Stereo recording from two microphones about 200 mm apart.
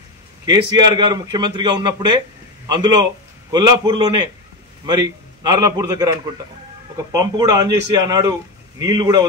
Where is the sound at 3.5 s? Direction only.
20° right (ahead or behind).